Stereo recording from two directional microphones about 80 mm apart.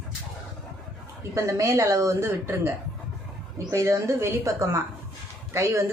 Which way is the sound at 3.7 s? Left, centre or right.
Right.